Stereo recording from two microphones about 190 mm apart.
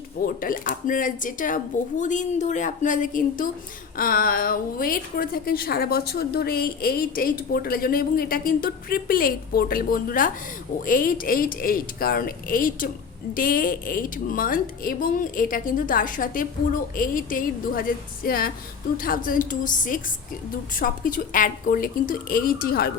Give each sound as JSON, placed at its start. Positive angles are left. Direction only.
{"t": 0.4, "sound": "a woman's voice", "side_deg": 45}